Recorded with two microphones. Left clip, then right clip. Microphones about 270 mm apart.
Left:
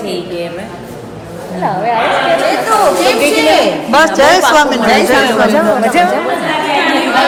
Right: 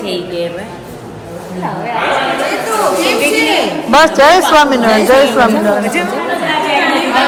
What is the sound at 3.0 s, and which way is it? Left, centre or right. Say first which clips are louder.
Speech: left 2 dB; left.